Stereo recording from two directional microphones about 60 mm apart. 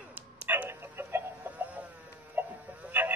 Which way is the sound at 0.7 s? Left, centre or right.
Right.